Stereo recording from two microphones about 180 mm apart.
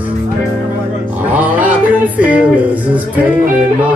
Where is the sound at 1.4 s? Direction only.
10° right (ahead or behind).